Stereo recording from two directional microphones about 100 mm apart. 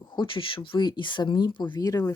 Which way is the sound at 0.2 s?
60° left (ahead or behind).